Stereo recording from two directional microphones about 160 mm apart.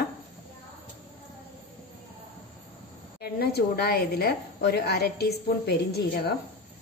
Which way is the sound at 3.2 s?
80° left.